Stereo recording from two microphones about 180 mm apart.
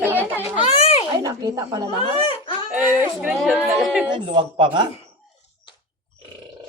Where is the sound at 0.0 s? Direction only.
10° right (ahead or behind).